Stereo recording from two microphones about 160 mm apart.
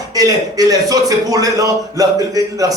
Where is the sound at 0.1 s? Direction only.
20° right (ahead or behind).